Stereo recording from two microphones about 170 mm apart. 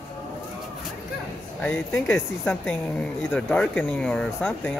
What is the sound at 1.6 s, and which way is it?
Speech, 15° left (ahead or behind).